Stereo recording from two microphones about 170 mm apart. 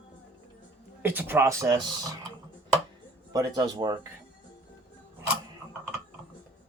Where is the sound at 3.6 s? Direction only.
25° right (ahead or behind).